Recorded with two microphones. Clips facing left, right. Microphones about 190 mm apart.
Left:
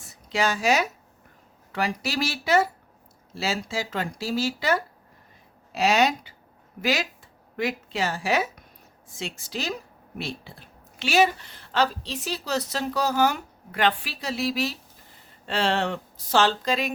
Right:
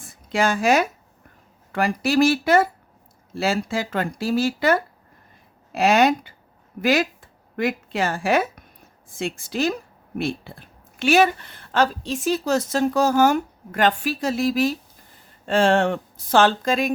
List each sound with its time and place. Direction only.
0.0 s a woman's voice: 50° right (ahead or behind)